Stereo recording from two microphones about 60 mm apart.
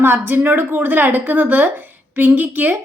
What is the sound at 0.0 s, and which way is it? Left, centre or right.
Speech, right.